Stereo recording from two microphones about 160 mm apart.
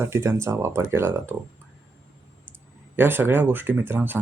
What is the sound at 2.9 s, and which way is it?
Speech, 15° right (ahead or behind).